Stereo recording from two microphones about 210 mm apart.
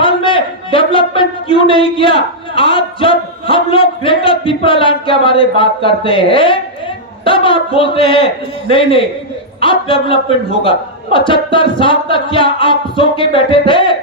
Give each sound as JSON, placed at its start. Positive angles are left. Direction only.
{"t": 0.0, "sound": "a man's voice", "side_deg": 25}